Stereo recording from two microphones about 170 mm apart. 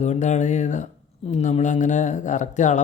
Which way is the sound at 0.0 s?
45° left (ahead or behind).